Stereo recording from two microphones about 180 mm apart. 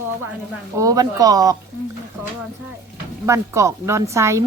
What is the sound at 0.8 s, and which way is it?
Speech, 20° right (ahead or behind).